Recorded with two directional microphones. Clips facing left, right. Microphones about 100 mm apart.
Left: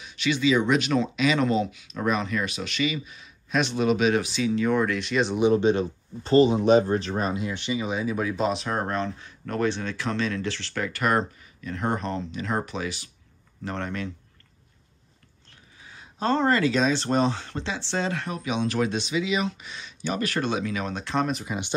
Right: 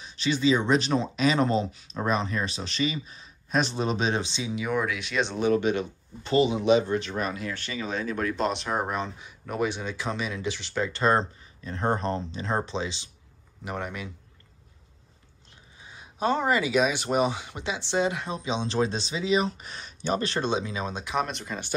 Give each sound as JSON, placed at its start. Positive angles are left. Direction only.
{"t": 0.0, "sound": "speech", "side_deg": -35}
{"t": 5.5, "sound": "speech", "side_deg": 30}
{"t": 13.7, "sound": "speech", "side_deg": -10}
{"t": 15.9, "sound": "speech", "side_deg": -15}
{"t": 21.3, "sound": "speech", "side_deg": 5}